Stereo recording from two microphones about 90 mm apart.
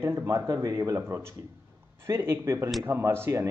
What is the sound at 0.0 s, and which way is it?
Speech, 30° right (ahead or behind).